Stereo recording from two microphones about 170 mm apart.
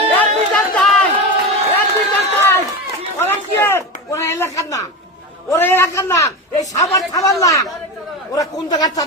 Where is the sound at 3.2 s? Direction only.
15° left (ahead or behind).